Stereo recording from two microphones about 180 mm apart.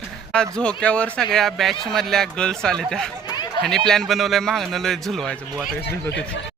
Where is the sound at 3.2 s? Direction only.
25° left (ahead or behind).